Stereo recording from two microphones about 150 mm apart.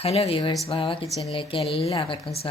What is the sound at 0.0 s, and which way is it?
Speech, 40° left (ahead or behind).